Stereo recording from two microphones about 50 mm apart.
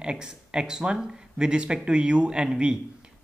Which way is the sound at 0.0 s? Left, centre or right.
Centre.